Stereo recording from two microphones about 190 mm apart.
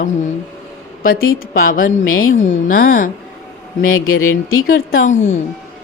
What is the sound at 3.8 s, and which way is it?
Speech, 90° left.